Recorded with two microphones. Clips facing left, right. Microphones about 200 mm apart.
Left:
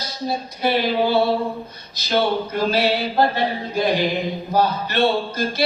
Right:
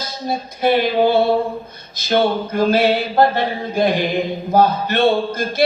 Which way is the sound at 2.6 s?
50° right (ahead or behind).